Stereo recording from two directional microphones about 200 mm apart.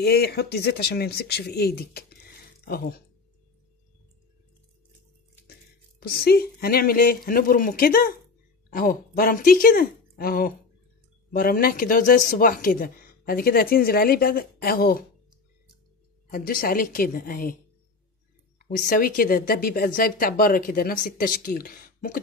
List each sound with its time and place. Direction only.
0.0 s speech: 50° left (ahead or behind)
5.9 s speech: 50° left (ahead or behind)
16.3 s speech: 45° left (ahead or behind)
18.6 s speech: 45° left (ahead or behind)